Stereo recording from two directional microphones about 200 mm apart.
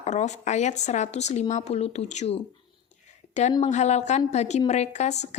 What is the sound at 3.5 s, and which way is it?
A woman's voice, 30° left (ahead or behind).